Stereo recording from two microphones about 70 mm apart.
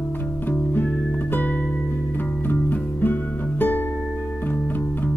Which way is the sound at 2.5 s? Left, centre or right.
Left.